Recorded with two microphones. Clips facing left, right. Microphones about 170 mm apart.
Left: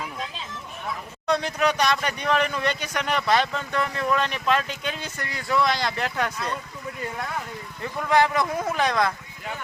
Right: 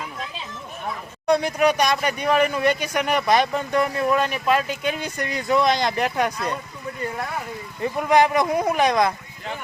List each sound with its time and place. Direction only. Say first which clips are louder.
1.3 s speech: right 5 dB; 10° right (ahead or behind)
7.8 s speech: right 4 dB; 15° right (ahead or behind)